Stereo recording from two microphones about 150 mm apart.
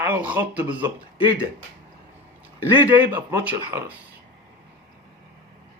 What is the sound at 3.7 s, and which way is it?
Speech, 20° right (ahead or behind).